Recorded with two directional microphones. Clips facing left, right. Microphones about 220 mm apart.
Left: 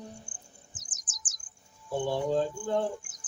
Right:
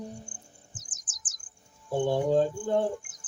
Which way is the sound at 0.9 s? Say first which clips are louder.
Left 3 dB; 50° right (ahead or behind).